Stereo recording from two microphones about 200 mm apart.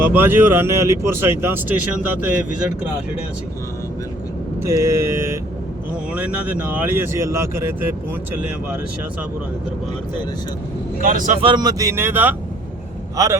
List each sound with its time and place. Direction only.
0.0 s speech: 10° right (ahead or behind)
4.6 s speech: 15° right (ahead or behind)
11.0 s speech: 40° right (ahead or behind)
11.4 s speech: 20° right (ahead or behind)